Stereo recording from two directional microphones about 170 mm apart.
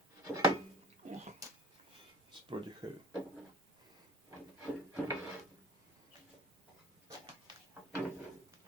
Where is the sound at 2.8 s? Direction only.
25° right (ahead or behind).